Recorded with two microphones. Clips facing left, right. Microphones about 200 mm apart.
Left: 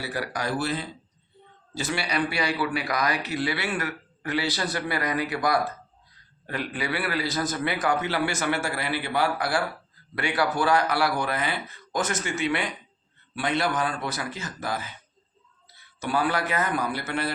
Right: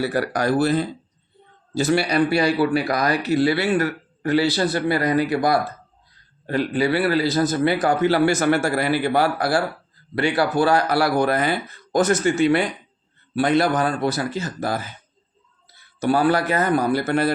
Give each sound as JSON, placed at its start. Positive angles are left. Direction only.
{"t": 0.0, "sound": "speech", "side_deg": -50}
{"t": 16.0, "sound": "speech", "side_deg": -40}